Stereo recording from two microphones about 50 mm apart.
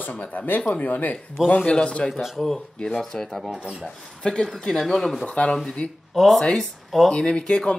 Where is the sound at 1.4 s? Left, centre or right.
Centre.